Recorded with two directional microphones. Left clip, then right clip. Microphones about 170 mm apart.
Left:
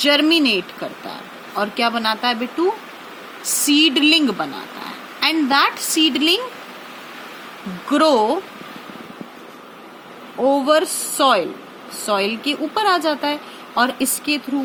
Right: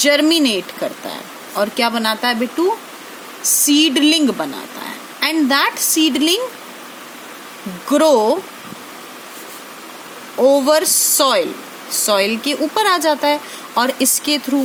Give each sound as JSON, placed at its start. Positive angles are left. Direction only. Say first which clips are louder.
{"t": 0.0, "sound": "speech", "louder": "right 2 dB", "side_deg": -70}
{"t": 3.7, "sound": "speech", "louder": "even", "side_deg": -60}
{"t": 7.9, "sound": "speech", "louder": "right 3 dB", "side_deg": -60}
{"t": 10.4, "sound": "speech", "louder": "right 3 dB", "side_deg": -70}